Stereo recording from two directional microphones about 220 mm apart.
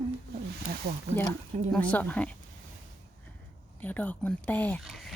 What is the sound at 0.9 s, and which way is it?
Speech, 40° right (ahead or behind).